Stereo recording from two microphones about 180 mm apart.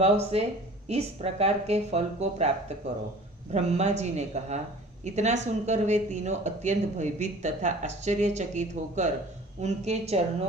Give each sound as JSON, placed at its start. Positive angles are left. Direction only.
{"t": 0.0, "sound": "speech", "side_deg": -35}